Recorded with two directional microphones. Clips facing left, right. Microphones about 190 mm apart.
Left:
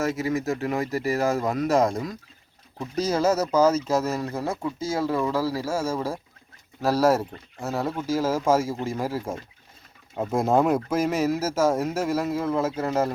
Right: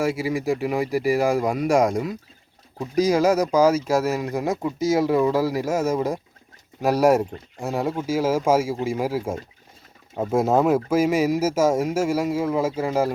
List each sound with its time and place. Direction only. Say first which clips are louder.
0.0 s speech: right 2 dB; 10° right (ahead or behind)